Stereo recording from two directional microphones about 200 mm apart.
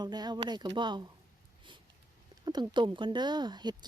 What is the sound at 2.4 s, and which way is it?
Speech, 20° right (ahead or behind).